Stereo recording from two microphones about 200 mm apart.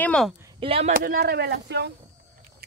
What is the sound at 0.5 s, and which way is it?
Speech, 30° right (ahead or behind).